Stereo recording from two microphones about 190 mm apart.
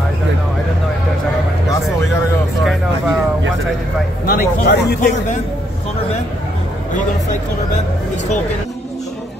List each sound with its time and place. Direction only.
2.6 s music: centre (ahead or behind)
4.3 s speech: 55° left (ahead or behind)